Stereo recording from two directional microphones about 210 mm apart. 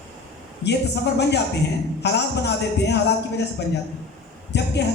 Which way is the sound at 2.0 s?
55° left (ahead or behind).